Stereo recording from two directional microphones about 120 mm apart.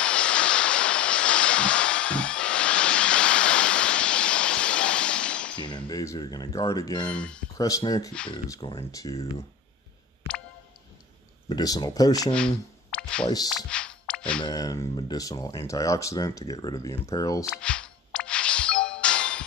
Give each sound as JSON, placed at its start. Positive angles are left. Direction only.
{"t": 0.0, "sound": "a sound", "side_deg": 10}
{"t": 5.9, "sound": "speech", "side_deg": 30}
{"t": 7.1, "sound": "speech", "side_deg": 10}
{"t": 7.5, "sound": "speech", "side_deg": 30}
{"t": 8.6, "sound": "speech", "side_deg": 45}
{"t": 8.9, "sound": "speech", "side_deg": 30}
{"t": 11.4, "sound": "speech", "side_deg": 35}
{"t": 12.3, "sound": "speech", "side_deg": 10}
{"t": 13.6, "sound": "music", "side_deg": 10}
{"t": 14.4, "sound": "speech", "side_deg": 30}
{"t": 17.5, "sound": "music", "side_deg": 5}